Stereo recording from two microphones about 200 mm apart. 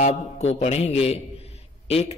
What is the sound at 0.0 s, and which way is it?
A man's voice, 30° left (ahead or behind).